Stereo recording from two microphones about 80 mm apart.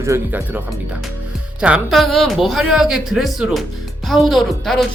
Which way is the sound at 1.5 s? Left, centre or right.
Centre.